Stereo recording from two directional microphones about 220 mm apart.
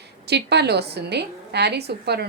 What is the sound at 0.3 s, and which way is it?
A woman's voice, 50° right (ahead or behind).